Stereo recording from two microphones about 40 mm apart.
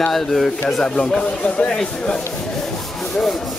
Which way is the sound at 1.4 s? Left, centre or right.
Left.